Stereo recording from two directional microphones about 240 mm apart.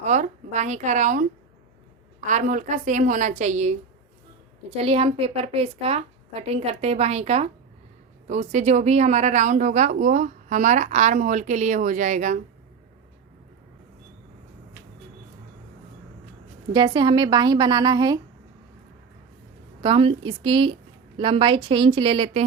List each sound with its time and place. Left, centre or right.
0.0 s a woman's voice: right
2.2 s a woman's voice: right
16.7 s a woman's voice: centre
19.8 s a woman's voice: right